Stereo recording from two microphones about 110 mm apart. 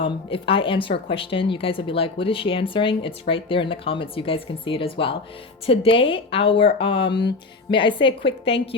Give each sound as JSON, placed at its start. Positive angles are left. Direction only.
{"t": 0.0, "sound": "a woman's voice", "side_deg": 55}